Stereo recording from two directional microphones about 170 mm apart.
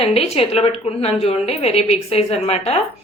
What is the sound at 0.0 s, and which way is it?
A woman's voice, 35° left (ahead or behind).